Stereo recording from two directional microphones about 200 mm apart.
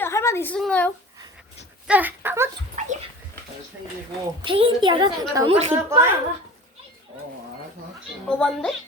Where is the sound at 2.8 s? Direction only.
40° right (ahead or behind).